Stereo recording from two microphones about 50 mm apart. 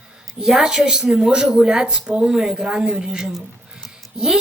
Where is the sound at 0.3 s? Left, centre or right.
Centre.